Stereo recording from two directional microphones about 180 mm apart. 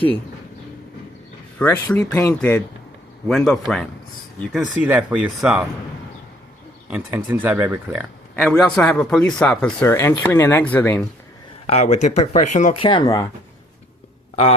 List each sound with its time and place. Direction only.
1.5 s a man's voice: 10° left (ahead or behind)
6.9 s speech: 10° right (ahead or behind)
8.4 s a man's voice: 5° left (ahead or behind)
11.6 s speech: 35° left (ahead or behind)
12.8 s speech: 25° left (ahead or behind)